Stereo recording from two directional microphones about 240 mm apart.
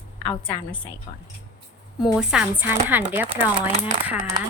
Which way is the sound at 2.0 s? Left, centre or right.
Centre.